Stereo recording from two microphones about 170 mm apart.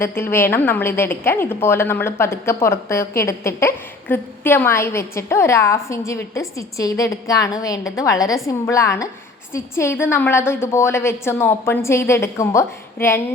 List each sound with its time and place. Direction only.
0.0 s a woman's voice: 15° left (ahead or behind)